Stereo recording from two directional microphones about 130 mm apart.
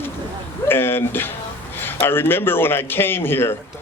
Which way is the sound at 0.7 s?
15° left (ahead or behind).